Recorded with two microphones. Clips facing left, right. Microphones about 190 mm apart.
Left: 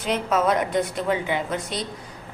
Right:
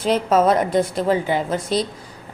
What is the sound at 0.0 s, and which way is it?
A woman's voice, 30° right (ahead or behind).